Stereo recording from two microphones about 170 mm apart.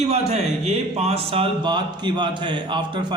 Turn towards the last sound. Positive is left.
turn(degrees=-25)  # may be behind; listen again after turning